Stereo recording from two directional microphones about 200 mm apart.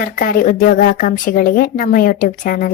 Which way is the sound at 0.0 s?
45° left (ahead or behind).